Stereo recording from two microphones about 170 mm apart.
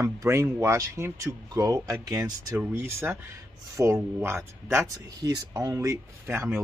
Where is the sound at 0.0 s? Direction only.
15° right (ahead or behind).